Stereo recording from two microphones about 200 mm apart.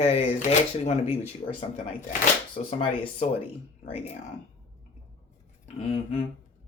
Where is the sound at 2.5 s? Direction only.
30° left (ahead or behind).